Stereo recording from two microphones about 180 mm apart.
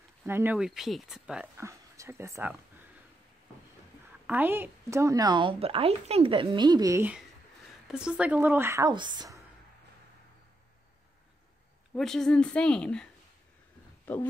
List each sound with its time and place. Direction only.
0.2 s speech: 10° right (ahead or behind)
1.6 s speech: 15° right (ahead or behind)
4.3 s speech: 10° right (ahead or behind)
7.9 s a woman's voice: 5° right (ahead or behind); by 9.4 s 25° right (ahead or behind)
11.9 s speech: centre (ahead or behind)